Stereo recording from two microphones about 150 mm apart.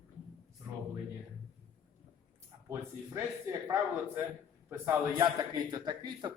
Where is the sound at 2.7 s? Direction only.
20° right (ahead or behind).